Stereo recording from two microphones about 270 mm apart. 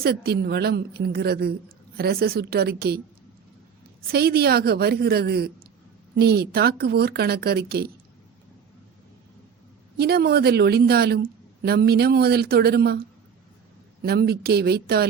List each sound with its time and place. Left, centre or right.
0.0 s speech: right
4.0 s speech: right
10.0 s speech: right